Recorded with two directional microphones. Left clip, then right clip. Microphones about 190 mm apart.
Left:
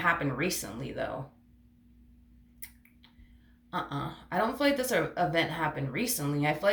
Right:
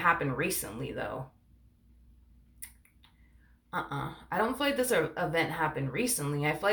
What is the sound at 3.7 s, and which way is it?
Speech, 35° right (ahead or behind).